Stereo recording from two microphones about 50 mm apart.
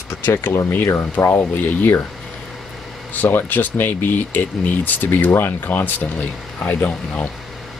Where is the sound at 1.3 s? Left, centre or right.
Left.